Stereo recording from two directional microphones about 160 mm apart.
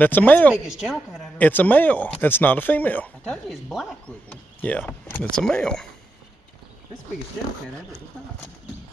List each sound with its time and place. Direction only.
0.0 s speech: 10° left (ahead or behind)
0.7 s a woman's voice: 5° right (ahead or behind)
1.4 s speech: 10° left (ahead or behind)